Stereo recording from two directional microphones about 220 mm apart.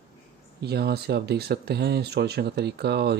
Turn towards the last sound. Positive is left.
turn(degrees=-50)  # may be behind; listen again after turning